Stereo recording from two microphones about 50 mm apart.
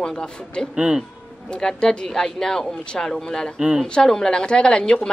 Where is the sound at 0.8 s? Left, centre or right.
Centre.